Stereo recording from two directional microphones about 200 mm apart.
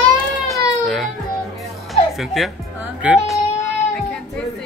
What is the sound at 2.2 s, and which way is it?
Speech, centre (ahead or behind).